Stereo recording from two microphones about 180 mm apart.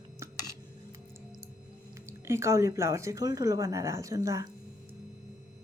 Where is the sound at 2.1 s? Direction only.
15° right (ahead or behind).